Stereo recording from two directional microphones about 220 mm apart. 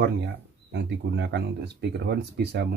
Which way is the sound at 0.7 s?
50° right (ahead or behind).